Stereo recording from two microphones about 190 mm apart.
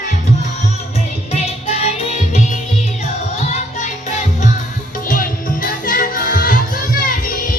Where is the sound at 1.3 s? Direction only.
35° left (ahead or behind).